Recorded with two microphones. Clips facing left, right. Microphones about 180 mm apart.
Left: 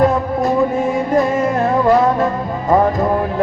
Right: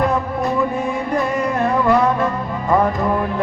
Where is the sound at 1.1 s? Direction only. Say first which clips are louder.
Left 4 dB; 40° left (ahead or behind).